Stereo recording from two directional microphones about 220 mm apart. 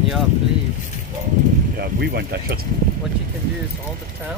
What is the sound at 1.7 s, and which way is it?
Speech, 45° right (ahead or behind).